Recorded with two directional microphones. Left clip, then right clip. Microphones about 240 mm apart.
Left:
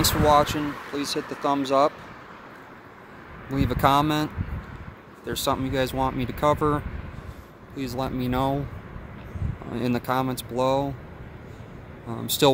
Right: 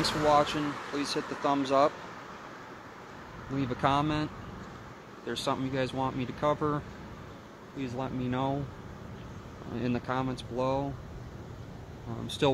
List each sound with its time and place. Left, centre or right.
0.3 s speech: centre
3.5 s speech: centre
7.8 s speech: left
9.8 s speech: centre
12.1 s speech: left